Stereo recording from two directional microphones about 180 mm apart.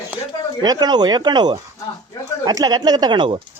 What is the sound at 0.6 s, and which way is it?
Speech, 20° right (ahead or behind).